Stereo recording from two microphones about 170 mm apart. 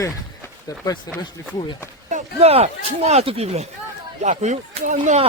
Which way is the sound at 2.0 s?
40° right (ahead or behind).